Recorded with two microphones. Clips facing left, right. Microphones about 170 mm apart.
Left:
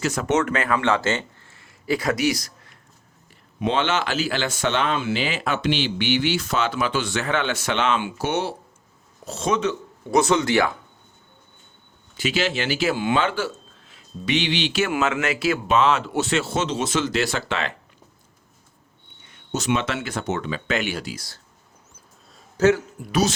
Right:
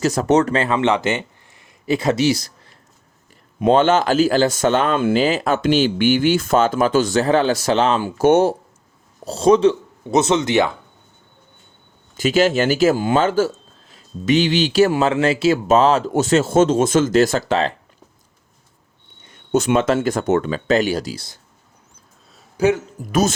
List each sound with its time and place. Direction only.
0.0 s speech: 35° right (ahead or behind)
3.6 s speech: 45° right (ahead or behind)
9.2 s speech: 35° right (ahead or behind)
12.1 s speech: 45° right (ahead or behind)
19.5 s speech: 55° right (ahead or behind); by 21.2 s 40° right (ahead or behind)
22.5 s speech: 15° right (ahead or behind)
23.0 s speech: 40° right (ahead or behind)